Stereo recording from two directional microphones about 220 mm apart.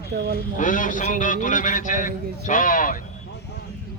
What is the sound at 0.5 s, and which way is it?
A man's voice, 35° left (ahead or behind).